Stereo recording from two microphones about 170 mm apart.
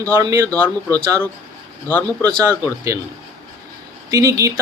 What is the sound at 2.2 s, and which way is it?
Speech, 20° right (ahead or behind).